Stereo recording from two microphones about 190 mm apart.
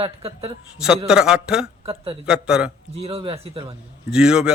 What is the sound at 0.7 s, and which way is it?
Speech, 5° right (ahead or behind).